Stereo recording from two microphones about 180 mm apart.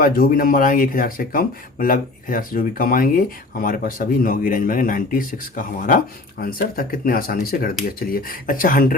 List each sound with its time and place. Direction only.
0.0 s speech: 55° left (ahead or behind)